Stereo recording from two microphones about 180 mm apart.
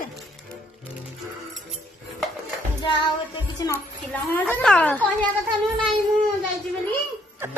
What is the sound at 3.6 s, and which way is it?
Speech, 20° left (ahead or behind).